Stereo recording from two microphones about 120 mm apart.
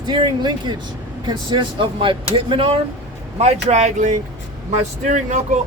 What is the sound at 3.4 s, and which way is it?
Speech, 65° right (ahead or behind).